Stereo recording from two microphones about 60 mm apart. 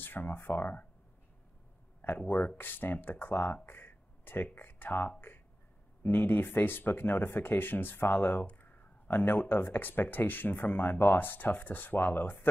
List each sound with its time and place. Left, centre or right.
0.0 s speech: left
2.0 s speech: left
3.6 s a sound: left
6.0 s speech: left